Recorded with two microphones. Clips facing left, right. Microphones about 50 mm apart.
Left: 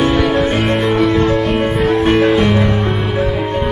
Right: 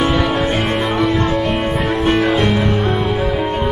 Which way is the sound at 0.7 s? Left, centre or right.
Centre.